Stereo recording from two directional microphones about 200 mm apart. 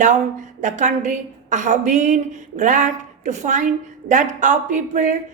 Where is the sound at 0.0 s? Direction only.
35° right (ahead or behind).